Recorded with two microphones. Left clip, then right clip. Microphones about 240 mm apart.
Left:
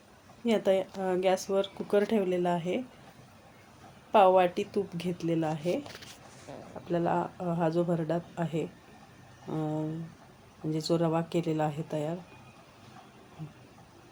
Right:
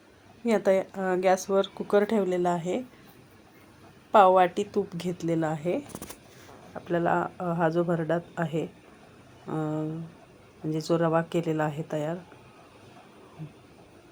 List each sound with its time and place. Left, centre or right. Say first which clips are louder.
0.4 s speech: right 3 dB; centre
4.1 s speech: right 3 dB; centre
6.8 s speech: right 4 dB; centre